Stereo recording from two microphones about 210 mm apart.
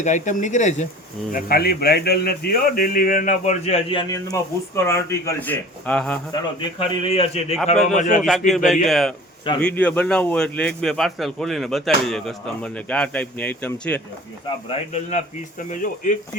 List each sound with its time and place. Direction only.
0.0 s a man's voice: 35° left (ahead or behind)
1.3 s a man's voice: 45° left (ahead or behind); by 6.1 s 5° left (ahead or behind)
6.7 s a man's voice: 25° left (ahead or behind)
8.2 s a man's voice: centre (ahead or behind)
14.7 s a man's voice: 30° left (ahead or behind)